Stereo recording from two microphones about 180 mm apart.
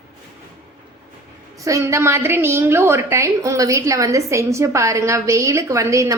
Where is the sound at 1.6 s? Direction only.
15° right (ahead or behind).